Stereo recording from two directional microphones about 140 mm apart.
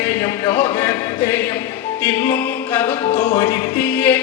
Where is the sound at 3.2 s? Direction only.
35° left (ahead or behind).